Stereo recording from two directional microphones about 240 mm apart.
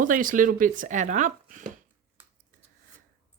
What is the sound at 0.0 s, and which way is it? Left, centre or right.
Speech, right.